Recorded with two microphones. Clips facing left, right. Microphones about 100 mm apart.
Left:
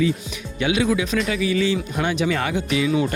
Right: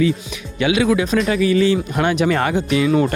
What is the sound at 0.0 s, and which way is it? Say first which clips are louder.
Speech: right 3 dB; 90° right.